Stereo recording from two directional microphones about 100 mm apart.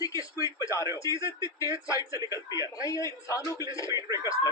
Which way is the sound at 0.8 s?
40° right (ahead or behind).